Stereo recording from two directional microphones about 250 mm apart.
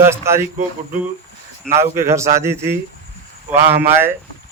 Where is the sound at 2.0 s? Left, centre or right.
Centre.